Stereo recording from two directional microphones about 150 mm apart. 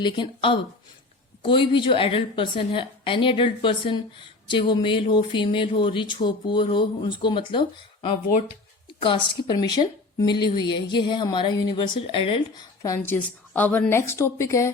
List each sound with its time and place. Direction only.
0.0 s a woman's voice: 35° left (ahead or behind)
9.0 s a woman's voice: 35° left (ahead or behind)
12.8 s a woman's voice: 20° left (ahead or behind)